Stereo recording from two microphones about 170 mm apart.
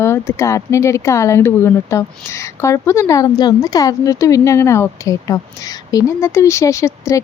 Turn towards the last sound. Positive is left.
turn(degrees=15)  # may be behind; listen again after turning